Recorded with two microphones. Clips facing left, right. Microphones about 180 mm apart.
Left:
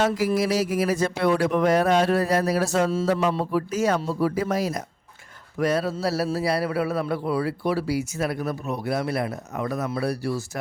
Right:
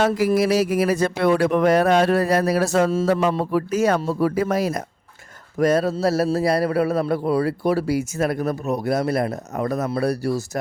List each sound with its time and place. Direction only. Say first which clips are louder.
0.3 s speech: right 4 dB; 65° right (ahead or behind)
5.5 s a man's voice: right 5 dB; 45° right (ahead or behind)